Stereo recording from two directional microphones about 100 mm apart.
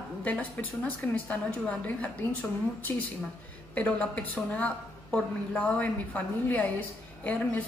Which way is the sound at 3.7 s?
10° left (ahead or behind).